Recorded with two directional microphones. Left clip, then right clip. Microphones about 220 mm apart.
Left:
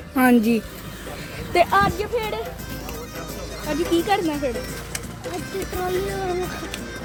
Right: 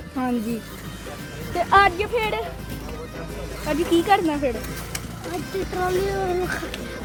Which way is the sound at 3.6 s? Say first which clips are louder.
Right 2 dB; centre (ahead or behind).